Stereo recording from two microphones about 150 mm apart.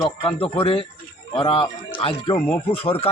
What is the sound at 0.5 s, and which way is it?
Speech, 35° left (ahead or behind).